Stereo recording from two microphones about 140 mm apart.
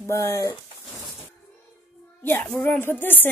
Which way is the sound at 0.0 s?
20° left (ahead or behind).